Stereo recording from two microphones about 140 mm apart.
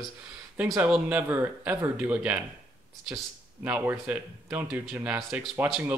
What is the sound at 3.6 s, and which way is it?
Speech, 15° right (ahead or behind).